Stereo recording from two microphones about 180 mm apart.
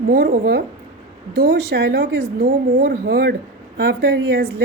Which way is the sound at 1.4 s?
70° right (ahead or behind).